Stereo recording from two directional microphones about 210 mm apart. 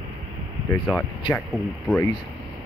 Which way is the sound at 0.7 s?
10° left (ahead or behind).